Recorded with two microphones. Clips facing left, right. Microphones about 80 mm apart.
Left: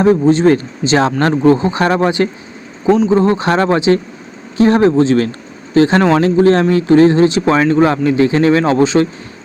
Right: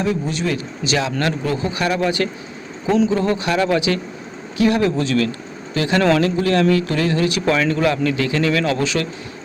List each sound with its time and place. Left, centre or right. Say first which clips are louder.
0.0 s speech: left 12 dB; left
3.8 s speech: left 7 dB; left